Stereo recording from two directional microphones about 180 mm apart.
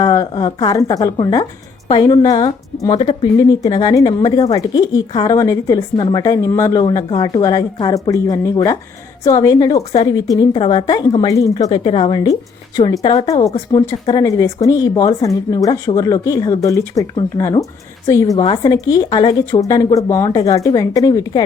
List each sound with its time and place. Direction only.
0.0 s speech: 20° left (ahead or behind)
9.7 s speech: 35° left (ahead or behind)
10.2 s speech: 25° left (ahead or behind)